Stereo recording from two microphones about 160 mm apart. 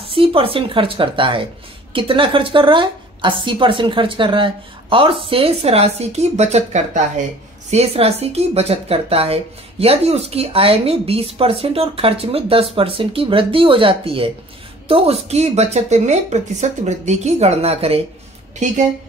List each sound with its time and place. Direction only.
0.0 s a woman's voice: 35° right (ahead or behind)